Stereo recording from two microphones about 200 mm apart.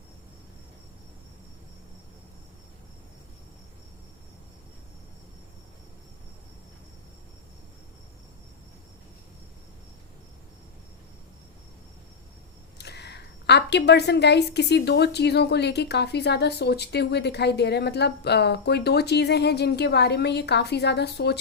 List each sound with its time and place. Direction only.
12.8 s a woman's voice: 55° left (ahead or behind)